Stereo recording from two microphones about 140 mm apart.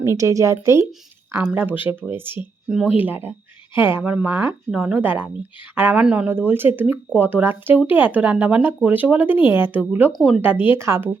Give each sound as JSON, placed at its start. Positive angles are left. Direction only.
{"t": 0.0, "sound": "speech", "side_deg": -20}
{"t": 10.1, "sound": "speech", "side_deg": 0}
{"t": 10.4, "sound": "speech", "side_deg": -15}